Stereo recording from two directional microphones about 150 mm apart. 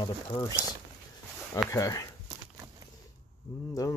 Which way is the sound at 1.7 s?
20° left (ahead or behind).